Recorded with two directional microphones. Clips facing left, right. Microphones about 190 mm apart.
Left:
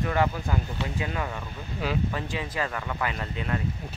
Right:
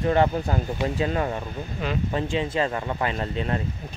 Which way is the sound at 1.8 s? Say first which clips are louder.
Even; 5° left (ahead or behind).